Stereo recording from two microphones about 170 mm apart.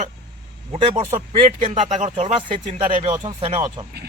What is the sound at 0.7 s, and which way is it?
A man's voice, 30° right (ahead or behind).